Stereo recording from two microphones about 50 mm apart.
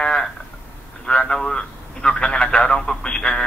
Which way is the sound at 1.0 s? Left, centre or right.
Centre.